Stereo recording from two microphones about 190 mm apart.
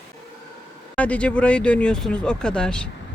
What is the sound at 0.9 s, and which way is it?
Speech, 5° left (ahead or behind).